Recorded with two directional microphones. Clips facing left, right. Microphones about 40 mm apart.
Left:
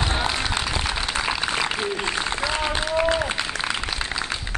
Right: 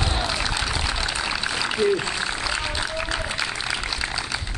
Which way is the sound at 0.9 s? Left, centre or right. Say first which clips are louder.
Left 1 dB; left.